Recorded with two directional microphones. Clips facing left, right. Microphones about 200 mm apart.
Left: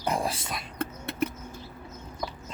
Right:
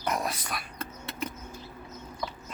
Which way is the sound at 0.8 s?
60° left (ahead or behind).